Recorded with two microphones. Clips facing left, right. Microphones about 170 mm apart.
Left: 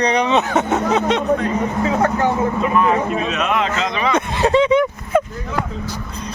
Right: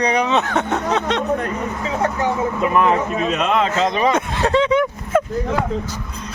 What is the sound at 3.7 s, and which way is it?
Speech, 40° right (ahead or behind).